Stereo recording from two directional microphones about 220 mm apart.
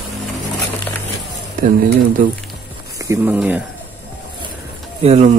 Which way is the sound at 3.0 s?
15° right (ahead or behind).